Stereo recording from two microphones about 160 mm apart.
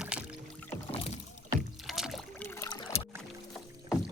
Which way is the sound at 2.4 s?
15° left (ahead or behind).